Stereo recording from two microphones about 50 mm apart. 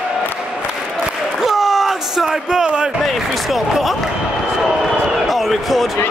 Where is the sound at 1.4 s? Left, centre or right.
Centre.